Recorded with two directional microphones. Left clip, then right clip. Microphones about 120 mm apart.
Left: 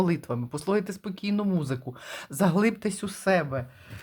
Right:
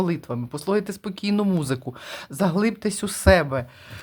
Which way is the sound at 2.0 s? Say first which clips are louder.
Even; 10° right (ahead or behind).